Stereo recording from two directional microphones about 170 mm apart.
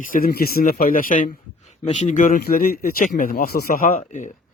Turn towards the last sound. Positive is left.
turn(degrees=45)  # may be behind; listen again after turning